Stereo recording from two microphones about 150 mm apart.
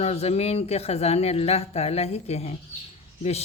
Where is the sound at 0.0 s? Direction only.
45° left (ahead or behind).